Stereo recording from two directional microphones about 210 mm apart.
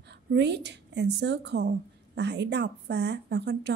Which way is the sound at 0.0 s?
55° right (ahead or behind).